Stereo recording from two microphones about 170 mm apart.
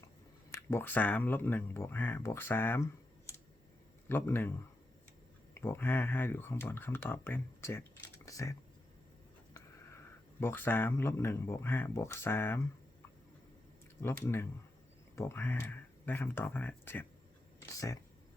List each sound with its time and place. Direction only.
0.5 s speech: 15° left (ahead or behind)
4.1 s speech: 10° left (ahead or behind)
10.4 s speech: 10° left (ahead or behind)
14.0 s speech: 15° left (ahead or behind)